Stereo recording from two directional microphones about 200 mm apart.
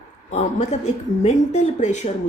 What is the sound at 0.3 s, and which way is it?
Speech, 30° left (ahead or behind).